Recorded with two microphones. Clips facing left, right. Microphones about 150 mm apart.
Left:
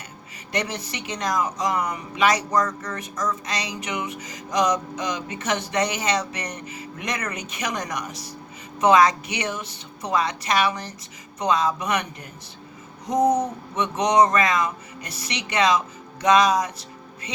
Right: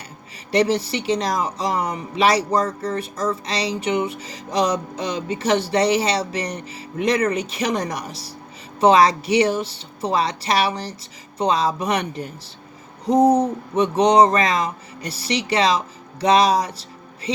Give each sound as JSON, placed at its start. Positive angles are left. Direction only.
{"t": 0.5, "sound": "speech", "side_deg": -30}